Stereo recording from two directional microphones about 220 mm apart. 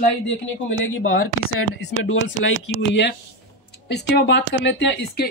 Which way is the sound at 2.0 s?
60° left (ahead or behind).